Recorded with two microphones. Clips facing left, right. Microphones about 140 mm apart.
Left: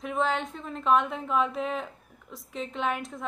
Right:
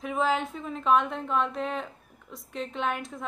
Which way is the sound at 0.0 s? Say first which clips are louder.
Right 1 dB; centre (ahead or behind).